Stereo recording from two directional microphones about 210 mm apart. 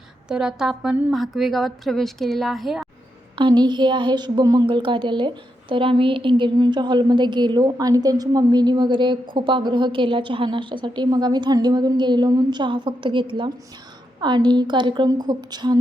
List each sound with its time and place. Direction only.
0.3 s a woman's voice: 5° right (ahead or behind)
3.3 s a woman's voice: 20° right (ahead or behind)